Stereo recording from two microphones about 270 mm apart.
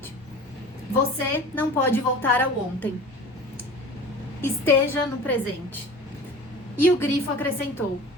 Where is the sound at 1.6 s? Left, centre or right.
Centre.